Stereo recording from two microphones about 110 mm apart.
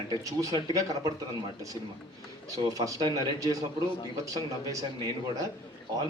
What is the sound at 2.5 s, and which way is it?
A man's voice, 35° right (ahead or behind).